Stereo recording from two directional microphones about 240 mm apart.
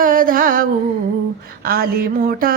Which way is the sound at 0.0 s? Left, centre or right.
Right.